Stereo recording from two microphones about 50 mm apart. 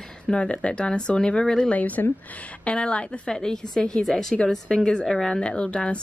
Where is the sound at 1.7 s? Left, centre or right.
Left.